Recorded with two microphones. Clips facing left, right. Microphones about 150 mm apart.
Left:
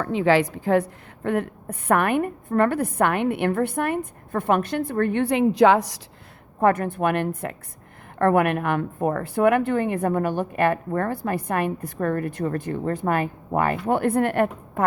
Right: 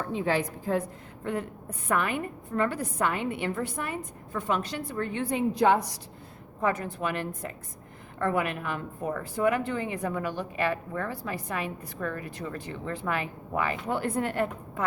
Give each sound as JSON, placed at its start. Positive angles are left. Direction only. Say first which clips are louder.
{"t": 0.0, "sound": "a woman's voice", "louder": "left 8 dB", "side_deg": 90}
{"t": 6.6, "sound": "a woman's voice", "louder": "left 8 dB", "side_deg": 55}